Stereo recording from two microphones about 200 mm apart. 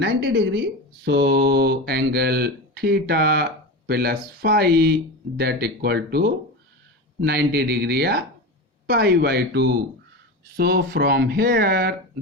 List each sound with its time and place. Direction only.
0.0 s speech: 60° right (ahead or behind)